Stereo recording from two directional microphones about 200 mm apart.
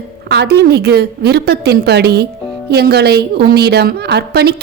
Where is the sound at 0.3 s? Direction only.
55° right (ahead or behind).